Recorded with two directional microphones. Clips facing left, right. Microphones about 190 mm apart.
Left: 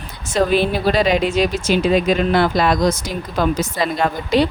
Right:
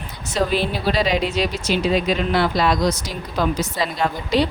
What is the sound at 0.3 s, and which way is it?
Speech, 55° left (ahead or behind).